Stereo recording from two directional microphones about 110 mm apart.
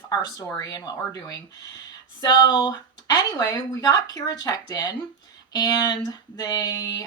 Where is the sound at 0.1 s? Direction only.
40° left (ahead or behind).